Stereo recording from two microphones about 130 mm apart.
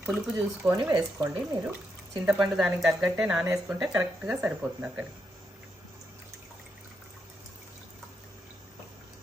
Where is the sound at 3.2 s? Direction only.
5° right (ahead or behind).